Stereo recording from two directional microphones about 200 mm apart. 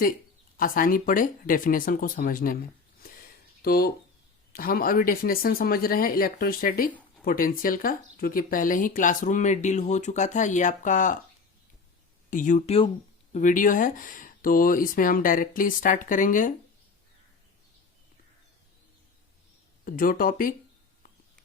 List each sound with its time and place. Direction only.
0.5 s speech: 45° left (ahead or behind)
3.0 s a sound: 50° left (ahead or behind)
4.5 s speech: 45° left (ahead or behind)
12.3 s speech: 40° left (ahead or behind)
19.8 s speech: 45° left (ahead or behind)